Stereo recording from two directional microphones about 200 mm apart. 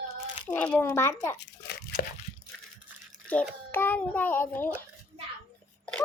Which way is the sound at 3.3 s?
10° left (ahead or behind).